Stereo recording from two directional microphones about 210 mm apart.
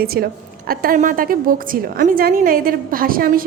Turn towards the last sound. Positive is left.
turn(degrees=-45)  # may be behind; listen again after turning